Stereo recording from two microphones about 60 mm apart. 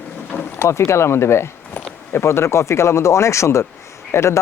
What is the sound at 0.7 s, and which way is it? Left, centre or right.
Speech, left.